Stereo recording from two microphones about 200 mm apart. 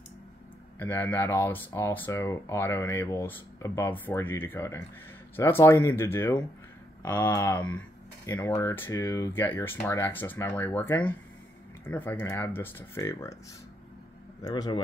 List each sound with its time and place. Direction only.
0.7 s speech: 10° left (ahead or behind)
14.4 s speech: 20° left (ahead or behind)